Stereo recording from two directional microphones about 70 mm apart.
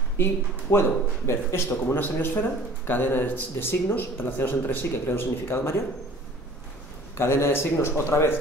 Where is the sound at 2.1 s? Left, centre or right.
Left.